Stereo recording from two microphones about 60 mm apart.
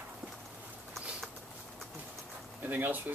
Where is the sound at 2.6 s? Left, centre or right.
Right.